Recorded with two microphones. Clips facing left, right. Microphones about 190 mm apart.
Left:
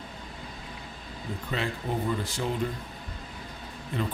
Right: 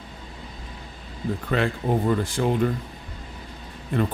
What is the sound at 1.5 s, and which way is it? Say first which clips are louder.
Speech: right 7 dB; 60° right (ahead or behind).